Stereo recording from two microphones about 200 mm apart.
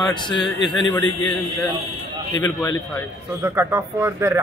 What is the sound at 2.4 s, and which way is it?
Speech, 20° left (ahead or behind).